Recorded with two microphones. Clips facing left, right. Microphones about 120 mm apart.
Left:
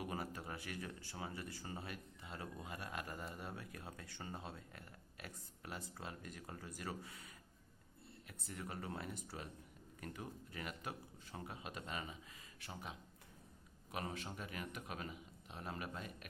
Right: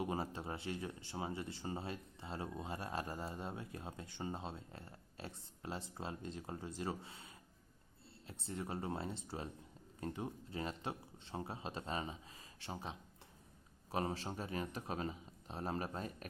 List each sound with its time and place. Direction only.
0.0 s speech: 25° right (ahead or behind)